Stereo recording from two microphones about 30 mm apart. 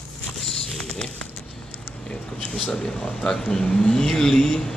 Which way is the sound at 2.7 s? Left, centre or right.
Left.